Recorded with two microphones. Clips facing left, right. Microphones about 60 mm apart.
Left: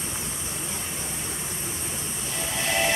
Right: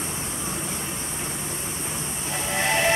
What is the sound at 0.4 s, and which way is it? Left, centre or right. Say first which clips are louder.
Vehicle: right 4 dB; right.